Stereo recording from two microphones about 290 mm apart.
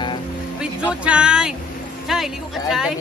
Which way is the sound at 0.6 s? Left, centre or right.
Centre.